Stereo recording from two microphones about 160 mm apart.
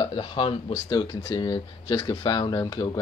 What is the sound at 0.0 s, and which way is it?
Speech, 30° left (ahead or behind).